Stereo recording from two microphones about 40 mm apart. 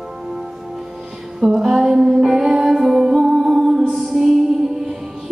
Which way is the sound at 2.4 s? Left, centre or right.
Centre.